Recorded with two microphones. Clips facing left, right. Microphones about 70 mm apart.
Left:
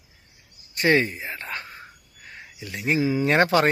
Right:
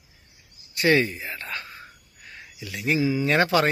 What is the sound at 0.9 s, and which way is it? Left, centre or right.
Speech, left.